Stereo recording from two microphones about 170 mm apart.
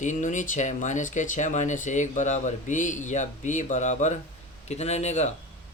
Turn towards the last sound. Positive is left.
turn(degrees=40)  # may be behind; listen again after turning